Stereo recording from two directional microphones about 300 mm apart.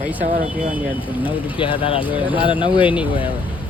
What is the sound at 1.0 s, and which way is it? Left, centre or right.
Speech, centre.